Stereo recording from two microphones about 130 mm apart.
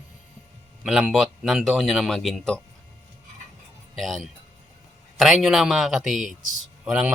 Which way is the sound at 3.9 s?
Centre (ahead or behind).